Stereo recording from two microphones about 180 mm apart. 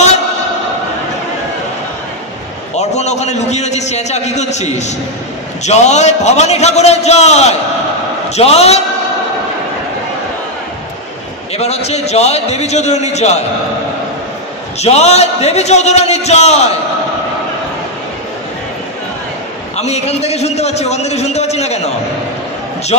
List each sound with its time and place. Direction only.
2.7 s a man's voice: 40° left (ahead or behind)
11.5 s a man's voice: 35° left (ahead or behind)
14.8 s a man's voice: 35° left (ahead or behind)
19.8 s a man's voice: 35° left (ahead or behind)